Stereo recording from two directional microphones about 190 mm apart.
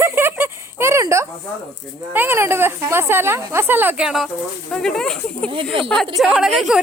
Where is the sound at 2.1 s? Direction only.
10° right (ahead or behind).